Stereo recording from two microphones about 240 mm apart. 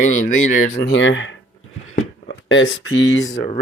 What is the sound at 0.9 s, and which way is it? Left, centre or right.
Speech, left.